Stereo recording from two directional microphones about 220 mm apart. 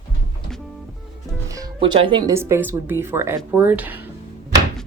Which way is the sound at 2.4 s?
10° right (ahead or behind).